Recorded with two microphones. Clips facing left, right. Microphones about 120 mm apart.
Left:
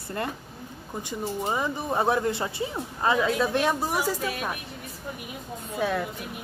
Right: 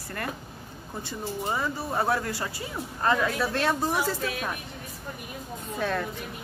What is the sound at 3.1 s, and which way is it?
Speech, 10° left (ahead or behind).